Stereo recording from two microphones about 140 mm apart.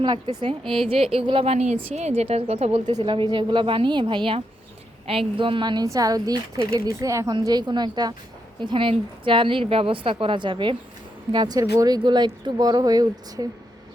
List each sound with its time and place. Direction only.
0.0 s a woman's voice: 35° right (ahead or behind)
2.8 s a woman's voice: 35° right (ahead or behind)